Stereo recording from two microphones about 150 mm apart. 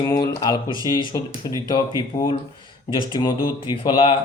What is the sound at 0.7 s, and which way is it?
Speech, 25° right (ahead or behind).